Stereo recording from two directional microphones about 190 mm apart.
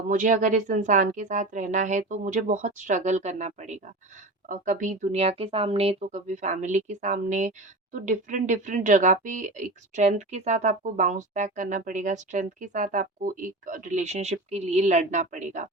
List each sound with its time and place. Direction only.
0.1 s speech: 40° right (ahead or behind)